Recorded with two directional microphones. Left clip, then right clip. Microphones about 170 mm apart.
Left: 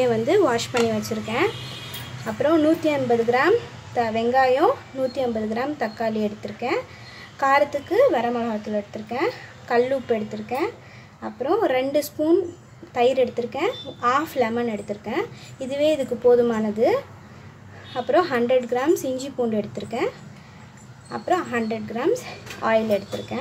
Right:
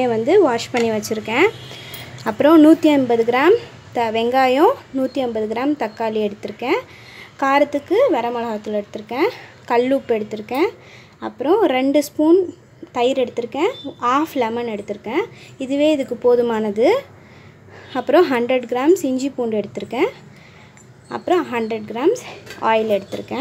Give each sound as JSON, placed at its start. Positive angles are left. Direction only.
{"t": 0.0, "sound": "a woman's voice", "side_deg": -20}